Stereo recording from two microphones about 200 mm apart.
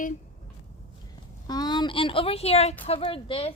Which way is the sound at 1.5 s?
20° left (ahead or behind).